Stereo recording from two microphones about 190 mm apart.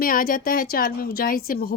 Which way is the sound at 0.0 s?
50° left (ahead or behind).